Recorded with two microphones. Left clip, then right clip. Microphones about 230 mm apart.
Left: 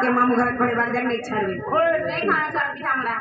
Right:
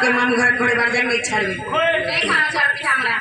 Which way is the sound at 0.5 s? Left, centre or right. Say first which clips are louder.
Right 5 dB; right.